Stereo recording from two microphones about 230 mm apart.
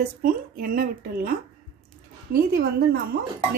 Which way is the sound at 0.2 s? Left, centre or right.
Right.